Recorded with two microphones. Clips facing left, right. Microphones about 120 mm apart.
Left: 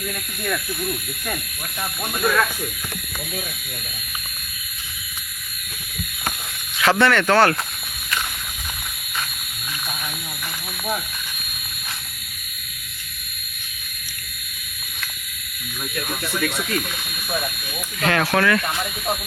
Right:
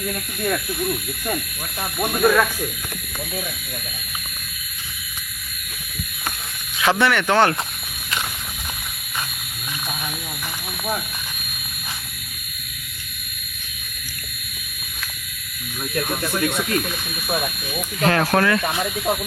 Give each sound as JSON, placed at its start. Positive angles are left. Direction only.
{"t": 0.1, "sound": "speech", "side_deg": -20}
{"t": 7.0, "sound": "speech", "side_deg": -15}
{"t": 16.4, "sound": "speech", "side_deg": -25}
{"t": 18.0, "sound": "speech", "side_deg": -35}